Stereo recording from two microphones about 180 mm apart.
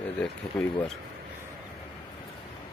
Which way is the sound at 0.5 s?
10° left (ahead or behind).